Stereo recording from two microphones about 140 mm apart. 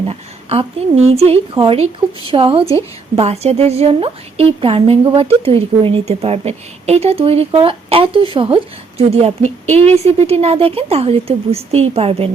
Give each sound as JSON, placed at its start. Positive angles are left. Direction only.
{"t": 0.0, "sound": "a woman's voice", "side_deg": -45}
{"t": 3.2, "sound": "a woman's voice", "side_deg": -45}